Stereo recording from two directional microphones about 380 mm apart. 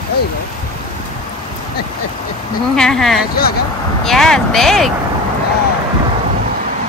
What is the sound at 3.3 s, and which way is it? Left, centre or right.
Speech, left.